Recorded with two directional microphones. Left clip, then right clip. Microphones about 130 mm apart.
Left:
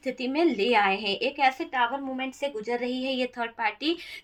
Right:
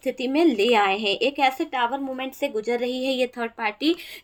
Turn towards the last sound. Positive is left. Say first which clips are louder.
# right 3 dB
turn(degrees=-65)  # may be behind; listen again after turning